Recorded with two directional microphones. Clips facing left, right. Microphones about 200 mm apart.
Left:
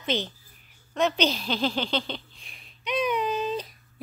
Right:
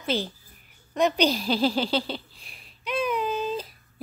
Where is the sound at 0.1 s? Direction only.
10° right (ahead or behind).